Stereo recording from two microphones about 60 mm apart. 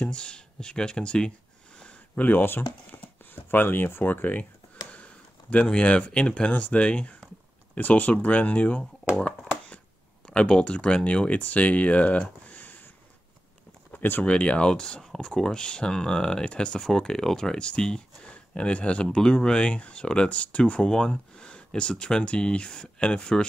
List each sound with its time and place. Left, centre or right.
0.0 s speech: centre
1.8 s a sound: left
2.9 s speech: left
10.2 s speech: centre
13.9 s speech: left
14.2 s speech: left